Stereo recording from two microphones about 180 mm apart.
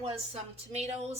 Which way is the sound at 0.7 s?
35° right (ahead or behind).